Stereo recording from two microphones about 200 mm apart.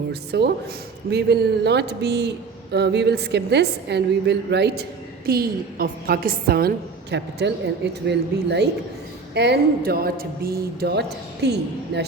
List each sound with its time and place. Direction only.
0.1 s a woman's voice: 55° right (ahead or behind)